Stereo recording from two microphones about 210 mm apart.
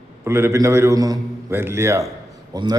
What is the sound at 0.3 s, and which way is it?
A man's voice, 10° right (ahead or behind).